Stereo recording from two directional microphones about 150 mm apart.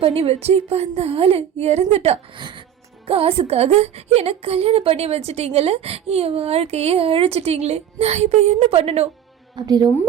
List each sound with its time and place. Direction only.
0.0 s a woman's voice: 40° right (ahead or behind)
2.4 s music: 30° right (ahead or behind)
3.1 s a woman's voice: 40° right (ahead or behind)
9.6 s a woman's voice: 25° right (ahead or behind)